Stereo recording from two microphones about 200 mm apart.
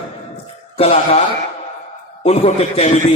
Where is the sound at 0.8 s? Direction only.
30° left (ahead or behind).